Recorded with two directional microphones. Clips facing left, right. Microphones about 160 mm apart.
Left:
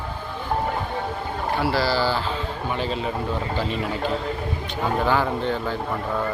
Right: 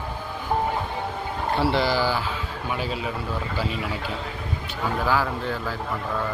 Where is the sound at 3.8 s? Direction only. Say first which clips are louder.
Left 5 dB; 45° left (ahead or behind).